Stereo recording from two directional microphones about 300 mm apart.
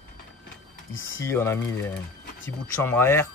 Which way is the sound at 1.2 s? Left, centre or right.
Centre.